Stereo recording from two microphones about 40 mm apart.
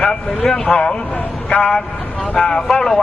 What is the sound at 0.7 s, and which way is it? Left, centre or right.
Speech, left.